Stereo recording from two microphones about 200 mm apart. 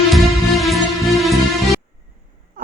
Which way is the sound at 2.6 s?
45° right (ahead or behind).